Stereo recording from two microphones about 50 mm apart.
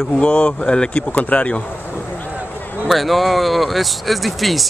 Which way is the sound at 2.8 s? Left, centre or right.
Centre.